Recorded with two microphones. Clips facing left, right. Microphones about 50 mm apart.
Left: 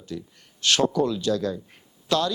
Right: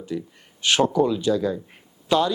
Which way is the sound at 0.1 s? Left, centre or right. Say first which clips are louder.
Right 4 dB; centre.